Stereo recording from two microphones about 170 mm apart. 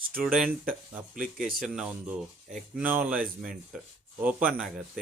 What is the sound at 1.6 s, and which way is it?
Speech, 5° right (ahead or behind).